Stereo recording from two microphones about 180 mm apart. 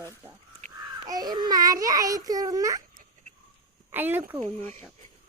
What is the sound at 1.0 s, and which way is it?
Child singing, 20° right (ahead or behind).